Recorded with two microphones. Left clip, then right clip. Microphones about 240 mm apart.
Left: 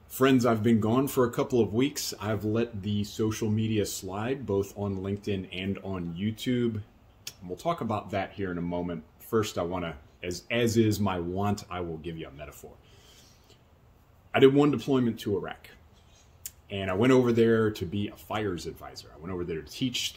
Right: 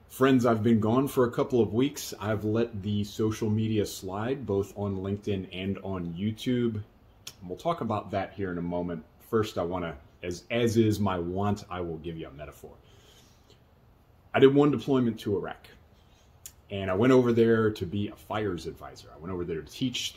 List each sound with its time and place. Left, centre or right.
0.1 s speech: centre
14.3 s speech: centre